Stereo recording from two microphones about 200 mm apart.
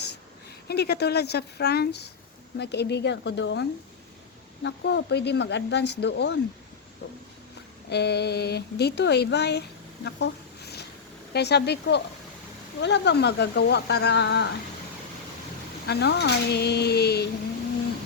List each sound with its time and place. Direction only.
0.7 s speech: 55° left (ahead or behind)
7.9 s speech: 55° left (ahead or behind)
15.9 s speech: 55° left (ahead or behind)